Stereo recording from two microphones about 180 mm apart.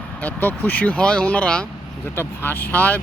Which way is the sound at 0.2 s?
10° left (ahead or behind).